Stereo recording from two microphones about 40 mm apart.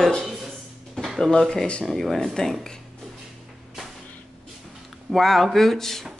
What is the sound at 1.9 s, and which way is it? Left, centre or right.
Speech, centre.